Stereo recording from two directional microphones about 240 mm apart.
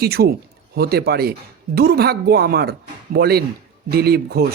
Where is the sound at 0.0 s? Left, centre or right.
Right.